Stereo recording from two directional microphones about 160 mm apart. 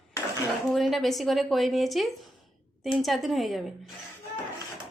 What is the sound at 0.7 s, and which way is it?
A woman's voice, centre (ahead or behind).